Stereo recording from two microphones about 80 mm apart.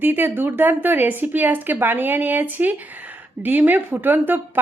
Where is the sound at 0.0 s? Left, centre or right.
Right.